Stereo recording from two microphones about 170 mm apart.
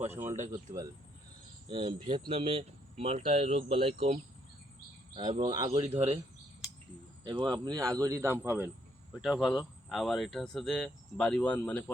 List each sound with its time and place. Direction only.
0.0 s speech: 10° right (ahead or behind); by 3.9 s 30° right (ahead or behind)
5.4 s speech: 20° right (ahead or behind)
5.8 s speech: 40° right (ahead or behind)
7.3 s speech: 25° right (ahead or behind)
9.2 s speech: centre (ahead or behind)